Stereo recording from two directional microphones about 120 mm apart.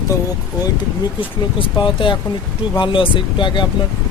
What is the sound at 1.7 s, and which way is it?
Speech, 40° left (ahead or behind).